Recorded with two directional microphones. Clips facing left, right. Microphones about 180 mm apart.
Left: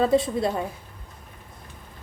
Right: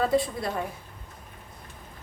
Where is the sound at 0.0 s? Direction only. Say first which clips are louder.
Left 4 dB; 25° left (ahead or behind).